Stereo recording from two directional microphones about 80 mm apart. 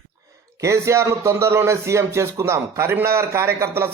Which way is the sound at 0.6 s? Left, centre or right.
Right.